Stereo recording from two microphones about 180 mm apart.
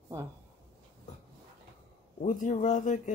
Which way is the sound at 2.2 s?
40° left (ahead or behind).